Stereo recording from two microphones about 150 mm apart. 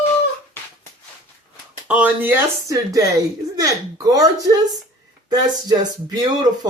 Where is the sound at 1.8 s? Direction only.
10° right (ahead or behind).